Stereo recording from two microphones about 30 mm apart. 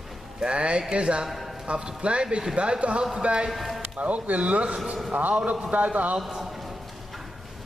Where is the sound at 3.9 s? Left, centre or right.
Right.